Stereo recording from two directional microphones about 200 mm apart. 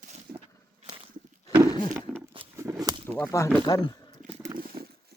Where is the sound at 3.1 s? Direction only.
10° left (ahead or behind).